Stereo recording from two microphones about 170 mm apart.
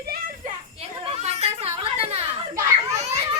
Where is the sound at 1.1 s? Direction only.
40° right (ahead or behind).